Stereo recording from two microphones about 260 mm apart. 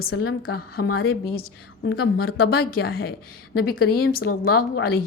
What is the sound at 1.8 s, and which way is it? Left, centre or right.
A woman's voice, left.